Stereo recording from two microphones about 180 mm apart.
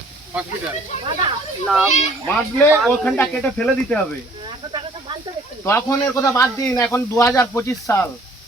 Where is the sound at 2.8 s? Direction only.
5° left (ahead or behind).